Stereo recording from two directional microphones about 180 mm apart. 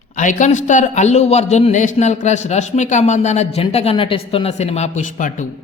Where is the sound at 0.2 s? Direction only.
45° left (ahead or behind).